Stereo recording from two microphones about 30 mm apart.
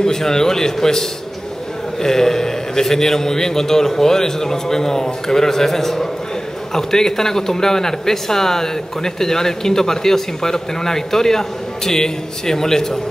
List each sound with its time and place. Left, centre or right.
0.0 s speech: centre